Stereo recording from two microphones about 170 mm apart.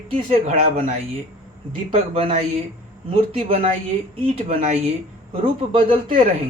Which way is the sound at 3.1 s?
35° right (ahead or behind).